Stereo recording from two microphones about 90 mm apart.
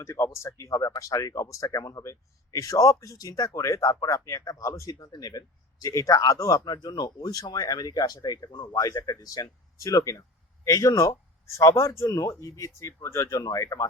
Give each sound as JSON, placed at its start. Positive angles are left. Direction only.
{"t": 0.0, "sound": "speech", "side_deg": 35}